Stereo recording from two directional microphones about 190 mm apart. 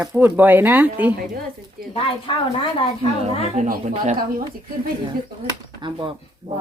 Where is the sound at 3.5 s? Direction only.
40° right (ahead or behind).